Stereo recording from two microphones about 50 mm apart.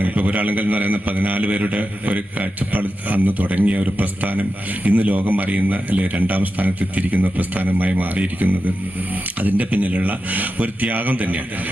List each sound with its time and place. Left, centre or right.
0.0 s a man's voice: right